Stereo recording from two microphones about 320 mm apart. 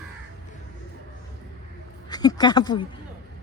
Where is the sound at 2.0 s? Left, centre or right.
Centre.